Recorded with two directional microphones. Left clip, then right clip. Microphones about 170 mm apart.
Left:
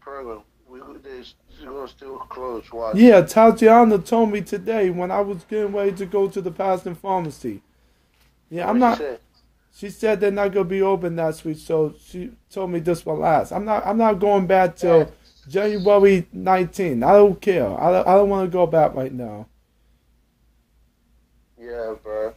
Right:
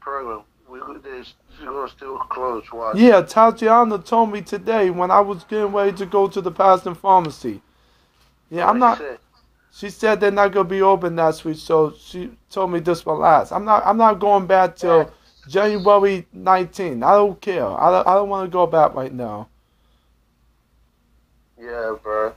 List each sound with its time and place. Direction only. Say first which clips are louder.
0.0 s speech: right 6 dB; 15° right (ahead or behind)
3.0 s a man's voice: even; 20° left (ahead or behind)
8.9 s speech: left 1 dB; 10° right (ahead or behind)
9.8 s speech: right 3 dB; 20° left (ahead or behind)
21.5 s speech: right 3 dB; 10° right (ahead or behind)